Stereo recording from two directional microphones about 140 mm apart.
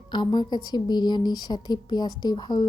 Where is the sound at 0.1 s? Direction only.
30° left (ahead or behind).